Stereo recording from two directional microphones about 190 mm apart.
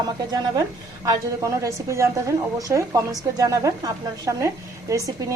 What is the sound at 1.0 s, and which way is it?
A woman's voice, 15° right (ahead or behind).